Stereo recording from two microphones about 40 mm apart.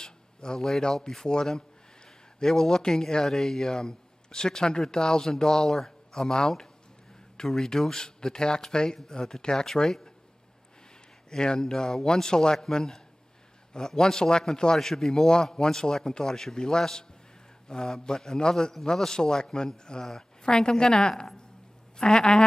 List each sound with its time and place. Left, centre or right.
0.0 s a sound: centre
0.6 s a man's voice: centre
11.2 s a man's voice: centre